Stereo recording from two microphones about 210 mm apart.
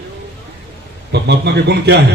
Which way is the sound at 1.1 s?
55° right (ahead or behind).